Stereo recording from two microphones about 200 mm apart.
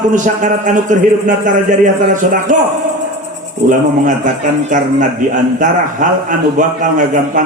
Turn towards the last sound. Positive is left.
turn(degrees=-40)  # may be behind; listen again after turning